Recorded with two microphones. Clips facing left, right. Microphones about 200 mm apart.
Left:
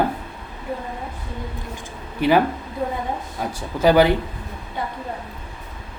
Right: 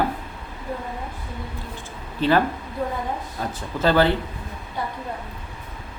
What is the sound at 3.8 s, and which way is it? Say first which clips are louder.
Mantra: left 4 dB; 15° left (ahead or behind).